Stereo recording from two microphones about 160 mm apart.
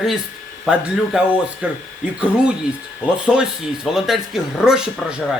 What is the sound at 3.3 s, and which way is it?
Speech, 5° right (ahead or behind).